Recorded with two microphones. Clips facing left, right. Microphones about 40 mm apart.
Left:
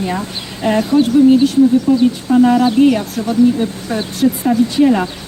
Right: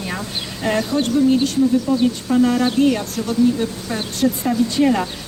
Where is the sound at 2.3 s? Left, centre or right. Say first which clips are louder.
Left 6 dB; centre.